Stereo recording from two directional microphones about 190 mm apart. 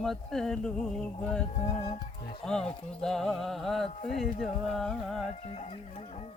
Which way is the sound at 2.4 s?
5° left (ahead or behind).